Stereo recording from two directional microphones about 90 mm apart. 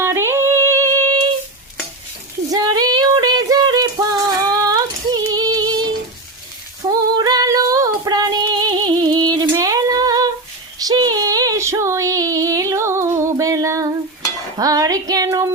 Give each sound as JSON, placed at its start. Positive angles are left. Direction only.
{"t": 0.0, "sound": "singing", "side_deg": -30}
{"t": 2.5, "sound": "a sound", "side_deg": -45}
{"t": 6.8, "sound": "female singing", "side_deg": -50}